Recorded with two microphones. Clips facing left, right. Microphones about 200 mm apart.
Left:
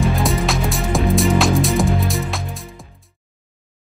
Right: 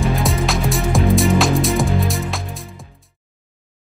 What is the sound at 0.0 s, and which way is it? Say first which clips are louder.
Music: even; centre (ahead or behind).